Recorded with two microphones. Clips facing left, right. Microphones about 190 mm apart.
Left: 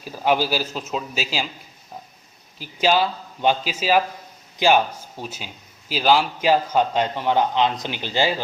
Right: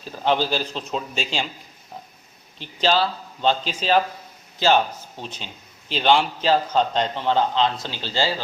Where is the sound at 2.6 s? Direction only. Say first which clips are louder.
Left 1 dB; 10° left (ahead or behind).